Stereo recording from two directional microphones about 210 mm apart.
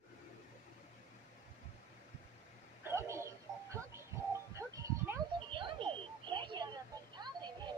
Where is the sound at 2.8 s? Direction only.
10° right (ahead or behind).